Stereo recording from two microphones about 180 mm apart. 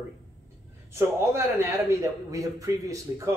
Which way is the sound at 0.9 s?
15° right (ahead or behind).